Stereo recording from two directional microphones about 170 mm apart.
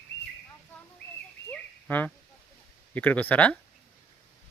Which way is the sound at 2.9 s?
10° left (ahead or behind).